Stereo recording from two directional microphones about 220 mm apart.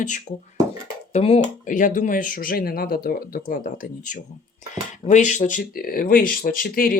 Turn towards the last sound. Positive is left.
turn(degrees=40)  # may be behind; listen again after turning